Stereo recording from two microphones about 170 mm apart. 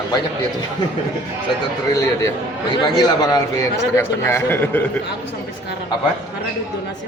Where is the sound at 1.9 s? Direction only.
20° left (ahead or behind).